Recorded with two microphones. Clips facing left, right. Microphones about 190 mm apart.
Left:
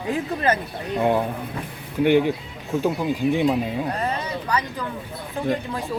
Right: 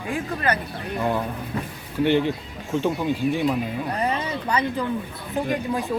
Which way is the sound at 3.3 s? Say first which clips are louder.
Left 4 dB; 20° left (ahead or behind).